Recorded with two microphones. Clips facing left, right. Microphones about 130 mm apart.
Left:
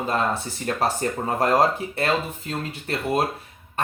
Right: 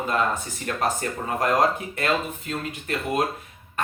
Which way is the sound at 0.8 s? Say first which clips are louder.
Left 2 dB; 35° left (ahead or behind).